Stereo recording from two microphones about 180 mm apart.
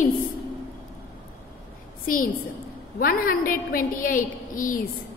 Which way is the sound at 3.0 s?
50° left (ahead or behind).